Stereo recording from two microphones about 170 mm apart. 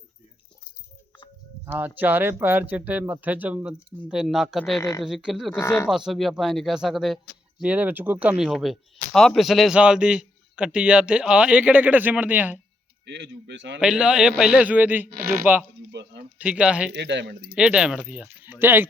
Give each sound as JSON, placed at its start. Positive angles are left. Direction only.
{"t": 1.6, "sound": "a man's voice", "side_deg": -10}
{"t": 4.8, "sound": "speech", "side_deg": 20}
{"t": 5.0, "sound": "a man's voice", "side_deg": 0}
{"t": 5.5, "sound": "speech", "side_deg": 15}
{"t": 6.1, "sound": "a man's voice", "side_deg": 0}
{"t": 13.1, "sound": "speech", "side_deg": -90}
{"t": 13.7, "sound": "a man's voice", "side_deg": -5}
{"t": 15.1, "sound": "speech", "side_deg": -60}
{"t": 15.9, "sound": "a sound", "side_deg": -90}
{"t": 16.4, "sound": "speech", "side_deg": -5}
{"t": 16.9, "sound": "speech", "side_deg": -90}
{"t": 17.5, "sound": "a man's voice", "side_deg": -5}